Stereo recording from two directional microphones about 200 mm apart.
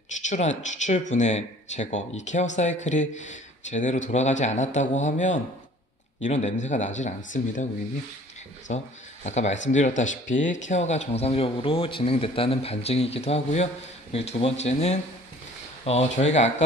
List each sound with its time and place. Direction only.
0.1 s speech: 35° left (ahead or behind)
8.6 s speech: 35° left (ahead or behind)